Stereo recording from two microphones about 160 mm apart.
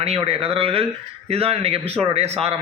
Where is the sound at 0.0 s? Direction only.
35° right (ahead or behind).